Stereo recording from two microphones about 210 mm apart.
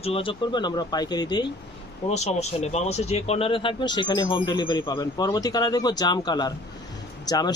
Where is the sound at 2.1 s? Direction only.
30° left (ahead or behind).